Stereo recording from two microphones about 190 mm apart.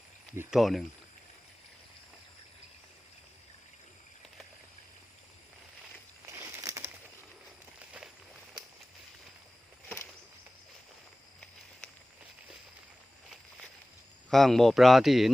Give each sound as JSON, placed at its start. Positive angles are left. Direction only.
{"t": 0.3, "sound": "speech", "side_deg": 0}
{"t": 6.2, "sound": "crumpling", "side_deg": -15}
{"t": 7.8, "sound": "a sound", "side_deg": -5}
{"t": 14.3, "sound": "speech", "side_deg": 0}